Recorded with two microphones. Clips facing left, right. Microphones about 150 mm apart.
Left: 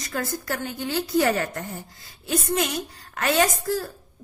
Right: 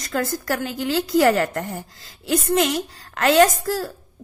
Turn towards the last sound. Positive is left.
turn(degrees=-90)